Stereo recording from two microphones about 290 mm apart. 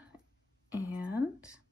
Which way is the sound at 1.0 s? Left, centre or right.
Centre.